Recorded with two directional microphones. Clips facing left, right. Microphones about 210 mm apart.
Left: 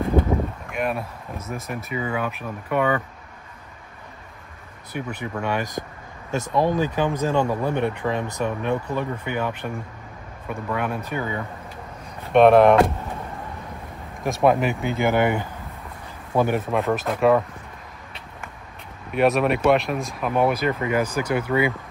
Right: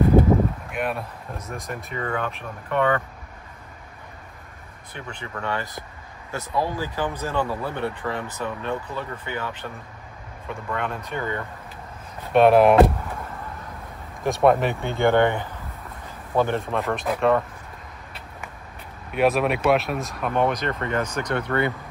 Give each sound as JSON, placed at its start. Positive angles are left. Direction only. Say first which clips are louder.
{"t": 0.7, "sound": "a sound", "louder": "left 2 dB", "side_deg": 0}
{"t": 1.5, "sound": "speech", "louder": "left 4 dB", "side_deg": 5}
{"t": 4.9, "sound": "speech", "louder": "left 6 dB", "side_deg": 15}
{"t": 10.7, "sound": "speech", "louder": "left 2 dB", "side_deg": 10}
{"t": 12.3, "sound": "speech", "louder": "left 2 dB", "side_deg": 0}
{"t": 14.2, "sound": "speech", "louder": "even", "side_deg": 0}
{"t": 19.1, "sound": "speech", "louder": "left 1 dB", "side_deg": 0}